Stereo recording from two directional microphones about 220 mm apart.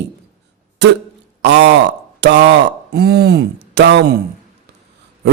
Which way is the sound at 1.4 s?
50° right (ahead or behind).